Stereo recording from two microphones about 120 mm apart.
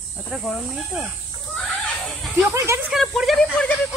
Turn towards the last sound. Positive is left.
turn(degrees=10)  # may be behind; listen again after turning